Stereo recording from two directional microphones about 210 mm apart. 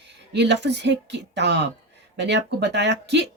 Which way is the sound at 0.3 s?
55° right (ahead or behind).